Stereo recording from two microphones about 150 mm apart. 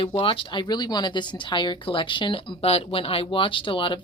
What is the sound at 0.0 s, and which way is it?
Speech, 35° left (ahead or behind).